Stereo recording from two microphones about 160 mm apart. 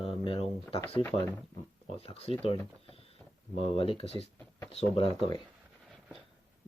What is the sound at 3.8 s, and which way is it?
Speech, 35° left (ahead or behind).